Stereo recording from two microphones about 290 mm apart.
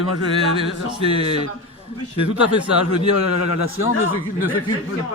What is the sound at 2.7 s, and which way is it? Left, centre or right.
A man's voice, left.